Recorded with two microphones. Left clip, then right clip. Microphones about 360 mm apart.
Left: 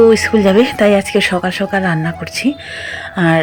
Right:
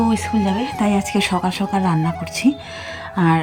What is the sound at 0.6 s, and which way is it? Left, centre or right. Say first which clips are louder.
Speech: left 9 dB; centre.